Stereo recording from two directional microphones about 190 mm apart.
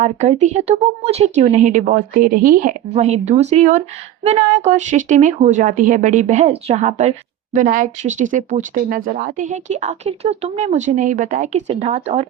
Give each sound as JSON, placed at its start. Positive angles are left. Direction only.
{"t": 0.0, "sound": "a woman's voice", "side_deg": -35}